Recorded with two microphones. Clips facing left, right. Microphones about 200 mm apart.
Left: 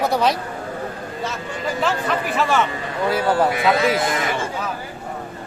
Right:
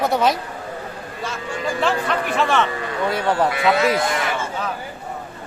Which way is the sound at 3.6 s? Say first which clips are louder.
Even; centre (ahead or behind).